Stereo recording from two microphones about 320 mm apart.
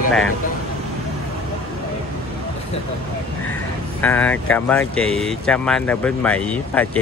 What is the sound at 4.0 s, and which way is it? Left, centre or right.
Speech, centre.